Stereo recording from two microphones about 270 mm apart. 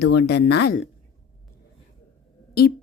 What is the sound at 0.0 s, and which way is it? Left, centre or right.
Speech, left.